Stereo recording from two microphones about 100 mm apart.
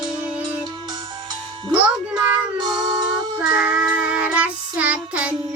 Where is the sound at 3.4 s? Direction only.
15° right (ahead or behind).